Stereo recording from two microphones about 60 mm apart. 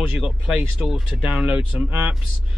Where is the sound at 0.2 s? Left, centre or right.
Centre.